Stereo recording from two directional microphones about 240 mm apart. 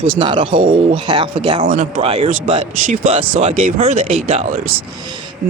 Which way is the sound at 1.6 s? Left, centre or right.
Right.